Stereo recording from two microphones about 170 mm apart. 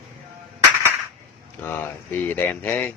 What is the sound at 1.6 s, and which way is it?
Speech, 10° left (ahead or behind).